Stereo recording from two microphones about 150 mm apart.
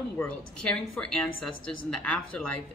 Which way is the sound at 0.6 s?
5° left (ahead or behind).